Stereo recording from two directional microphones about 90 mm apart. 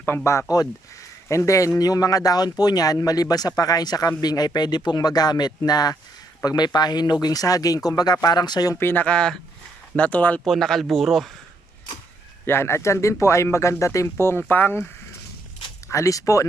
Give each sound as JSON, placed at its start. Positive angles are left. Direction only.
{"t": 0.1, "sound": "speech", "side_deg": 30}
{"t": 0.5, "sound": "speech", "side_deg": 45}
{"t": 8.7, "sound": "speech", "side_deg": 25}
{"t": 10.4, "sound": "speech", "side_deg": 5}
{"t": 12.5, "sound": "speech", "side_deg": 30}
{"t": 15.9, "sound": "speech", "side_deg": 35}